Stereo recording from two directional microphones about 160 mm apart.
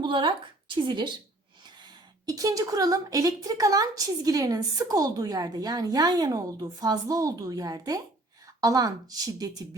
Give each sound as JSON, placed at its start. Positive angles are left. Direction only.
{"t": 0.0, "sound": "speech", "side_deg": -30}
{"t": 2.2, "sound": "a woman's voice", "side_deg": -20}